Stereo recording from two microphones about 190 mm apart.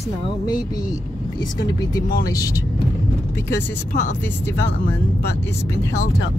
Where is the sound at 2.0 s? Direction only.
50° left (ahead or behind).